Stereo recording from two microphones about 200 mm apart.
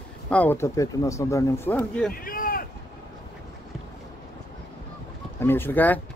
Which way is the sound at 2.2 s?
45° left (ahead or behind).